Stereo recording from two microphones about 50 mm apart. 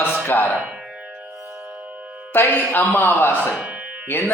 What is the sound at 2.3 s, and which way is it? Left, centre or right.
A man's voice, left.